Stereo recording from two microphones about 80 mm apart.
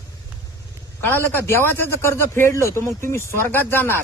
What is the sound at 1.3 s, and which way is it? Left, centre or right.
Speech, left.